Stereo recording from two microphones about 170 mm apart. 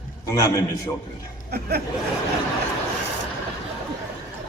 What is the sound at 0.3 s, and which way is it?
Speech, 20° left (ahead or behind).